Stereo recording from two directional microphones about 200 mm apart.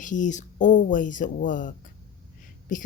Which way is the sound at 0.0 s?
40° left (ahead or behind).